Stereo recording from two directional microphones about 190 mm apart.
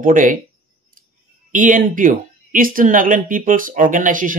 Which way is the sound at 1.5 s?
45° right (ahead or behind).